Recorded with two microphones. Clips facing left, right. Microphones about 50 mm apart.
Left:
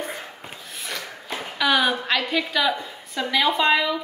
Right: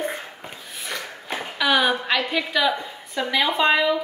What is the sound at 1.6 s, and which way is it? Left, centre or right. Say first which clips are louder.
A woman's voice: right 1 dB; centre.